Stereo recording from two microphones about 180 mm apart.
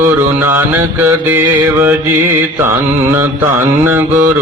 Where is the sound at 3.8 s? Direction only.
10° right (ahead or behind).